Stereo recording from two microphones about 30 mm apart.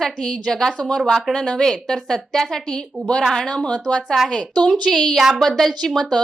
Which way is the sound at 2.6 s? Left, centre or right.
Left.